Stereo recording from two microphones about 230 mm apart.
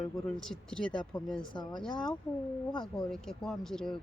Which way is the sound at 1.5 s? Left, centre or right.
Centre.